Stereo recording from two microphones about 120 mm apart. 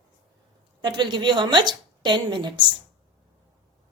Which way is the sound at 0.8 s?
40° right (ahead or behind).